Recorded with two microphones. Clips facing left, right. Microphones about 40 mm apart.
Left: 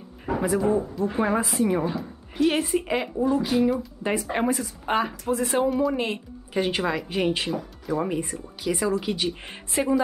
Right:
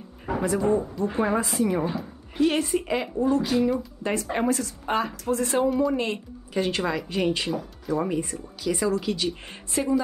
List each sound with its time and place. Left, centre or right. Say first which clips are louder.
0.3 s a woman's voice: even; centre